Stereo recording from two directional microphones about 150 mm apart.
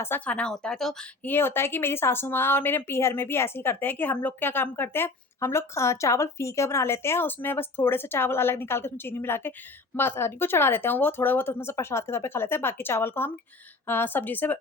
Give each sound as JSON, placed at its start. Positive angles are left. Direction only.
{"t": 0.0, "sound": "a woman's voice", "side_deg": 10}
{"t": 1.3, "sound": "a woman's voice", "side_deg": 15}